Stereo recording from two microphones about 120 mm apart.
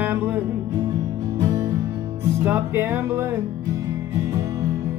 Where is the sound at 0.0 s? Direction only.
15° right (ahead or behind).